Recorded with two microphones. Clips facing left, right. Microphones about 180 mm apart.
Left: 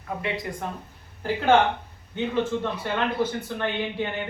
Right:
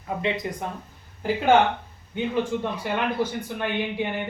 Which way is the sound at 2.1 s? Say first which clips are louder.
Even; 15° right (ahead or behind).